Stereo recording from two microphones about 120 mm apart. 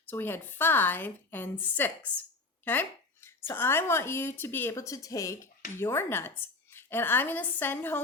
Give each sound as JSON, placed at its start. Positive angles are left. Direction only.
{"t": 0.1, "sound": "a woman's voice", "side_deg": 15}